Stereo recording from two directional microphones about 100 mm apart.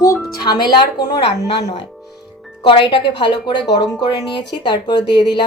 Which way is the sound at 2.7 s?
60° left (ahead or behind).